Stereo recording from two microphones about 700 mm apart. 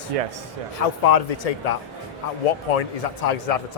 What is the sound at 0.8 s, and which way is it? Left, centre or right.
A man's voice, left.